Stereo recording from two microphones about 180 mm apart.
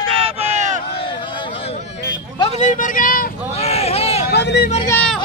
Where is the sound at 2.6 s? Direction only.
45° left (ahead or behind).